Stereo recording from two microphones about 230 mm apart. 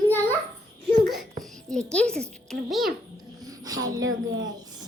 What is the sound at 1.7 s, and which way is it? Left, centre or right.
A child's voice, centre.